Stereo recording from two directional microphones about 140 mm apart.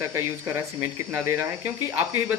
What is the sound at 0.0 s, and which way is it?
Speech, 15° right (ahead or behind).